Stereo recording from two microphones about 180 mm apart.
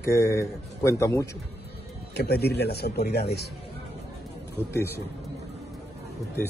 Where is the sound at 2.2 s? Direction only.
60° left (ahead or behind).